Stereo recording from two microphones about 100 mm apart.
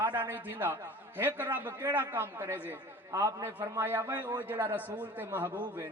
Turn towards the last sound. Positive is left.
turn(degrees=-20)  # may be behind; listen again after turning